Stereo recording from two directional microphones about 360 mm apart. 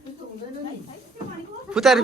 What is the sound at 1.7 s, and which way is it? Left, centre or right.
Speech, centre.